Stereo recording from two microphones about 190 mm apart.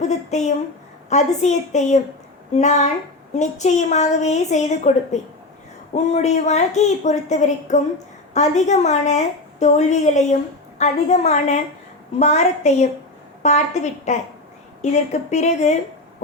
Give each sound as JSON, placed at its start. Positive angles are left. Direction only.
{"t": 0.0, "sound": "a woman's voice", "side_deg": 40}